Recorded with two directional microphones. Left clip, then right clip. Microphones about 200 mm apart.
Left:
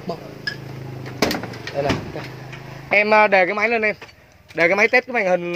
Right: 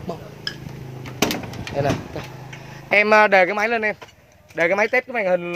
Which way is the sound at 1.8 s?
20° right (ahead or behind).